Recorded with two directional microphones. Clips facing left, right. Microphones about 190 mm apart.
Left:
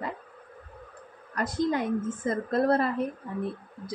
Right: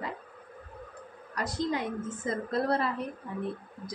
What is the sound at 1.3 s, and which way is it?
A woman's voice, 50° left (ahead or behind).